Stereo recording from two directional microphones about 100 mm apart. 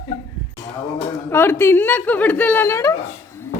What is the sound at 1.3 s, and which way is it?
A woman's voice, 25° left (ahead or behind).